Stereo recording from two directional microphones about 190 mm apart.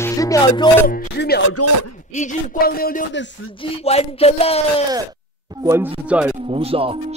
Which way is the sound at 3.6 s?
30° left (ahead or behind).